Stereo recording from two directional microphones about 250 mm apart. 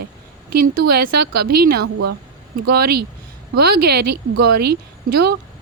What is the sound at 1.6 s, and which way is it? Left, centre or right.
A woman's voice, right.